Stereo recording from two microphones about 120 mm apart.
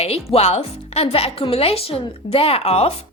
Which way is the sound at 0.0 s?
60° left (ahead or behind).